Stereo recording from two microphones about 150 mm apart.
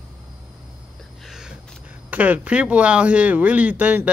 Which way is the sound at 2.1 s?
10° right (ahead or behind).